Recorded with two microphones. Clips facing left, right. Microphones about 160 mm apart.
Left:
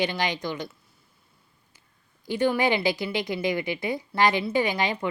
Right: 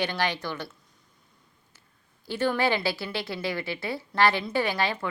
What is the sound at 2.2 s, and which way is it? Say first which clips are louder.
Speech: left 2 dB; 15° left (ahead or behind).